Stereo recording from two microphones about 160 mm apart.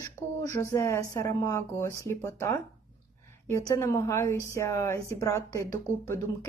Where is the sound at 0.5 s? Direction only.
20° left (ahead or behind).